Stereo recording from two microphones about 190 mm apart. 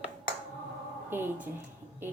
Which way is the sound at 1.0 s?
10° right (ahead or behind).